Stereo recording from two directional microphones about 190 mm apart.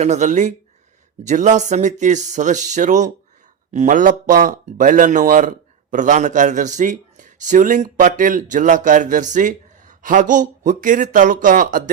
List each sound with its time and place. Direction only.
0.0 s speech: 40° right (ahead or behind)